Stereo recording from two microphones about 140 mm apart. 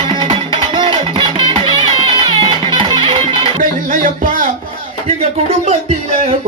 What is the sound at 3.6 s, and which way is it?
Music, 70° right (ahead or behind).